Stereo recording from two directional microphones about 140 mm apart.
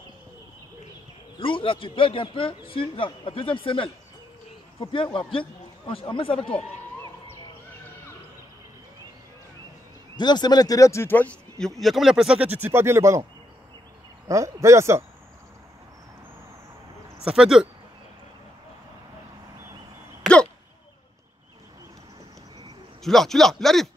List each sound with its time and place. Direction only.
1.4 s speech: 40° left (ahead or behind)
10.1 s speech: 30° left (ahead or behind); by 13.2 s 20° right (ahead or behind)
14.2 s speech: 20° right (ahead or behind)
17.2 s speech: 5° right (ahead or behind)
23.0 s speech: centre (ahead or behind)